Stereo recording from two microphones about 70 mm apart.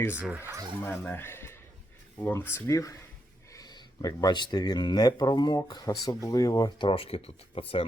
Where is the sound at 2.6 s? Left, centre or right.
Left.